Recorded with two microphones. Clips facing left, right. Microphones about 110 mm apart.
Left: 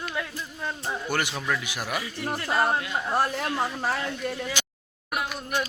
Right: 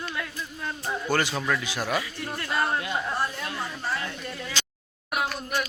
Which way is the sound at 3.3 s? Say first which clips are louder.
Left 6 dB; 85° left.